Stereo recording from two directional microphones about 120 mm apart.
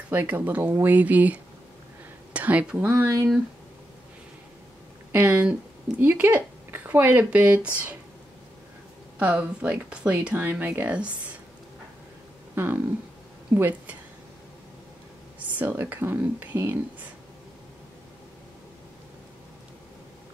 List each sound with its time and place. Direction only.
0.1 s speech: 15° right (ahead or behind)
5.1 s speech: 15° right (ahead or behind)
9.2 s speech: 10° right (ahead or behind)
12.5 s speech: 20° right (ahead or behind)
15.3 s speech: 15° right (ahead or behind)